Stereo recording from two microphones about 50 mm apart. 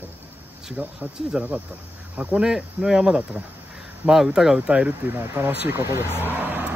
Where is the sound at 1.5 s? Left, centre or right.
Right.